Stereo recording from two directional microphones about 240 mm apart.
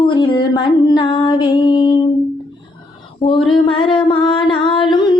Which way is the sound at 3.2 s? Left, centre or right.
Left.